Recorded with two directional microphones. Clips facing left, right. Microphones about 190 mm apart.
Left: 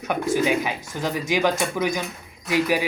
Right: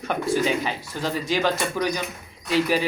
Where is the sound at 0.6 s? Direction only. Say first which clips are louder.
Left 1 dB; 15° left (ahead or behind).